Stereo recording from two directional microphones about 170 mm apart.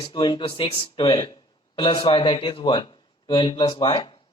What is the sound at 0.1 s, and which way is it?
Speech, 25° left (ahead or behind).